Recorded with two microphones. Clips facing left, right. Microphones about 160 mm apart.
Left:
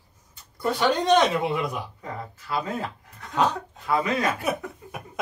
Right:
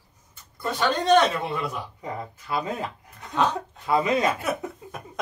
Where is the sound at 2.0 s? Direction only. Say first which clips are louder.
Right 2 dB; 15° right (ahead or behind).